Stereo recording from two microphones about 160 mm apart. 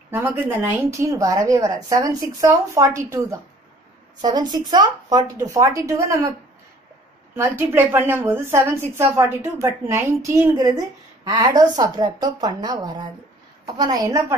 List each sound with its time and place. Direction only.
0.1 s a woman's voice: 15° right (ahead or behind)
7.3 s a woman's voice: 15° right (ahead or behind)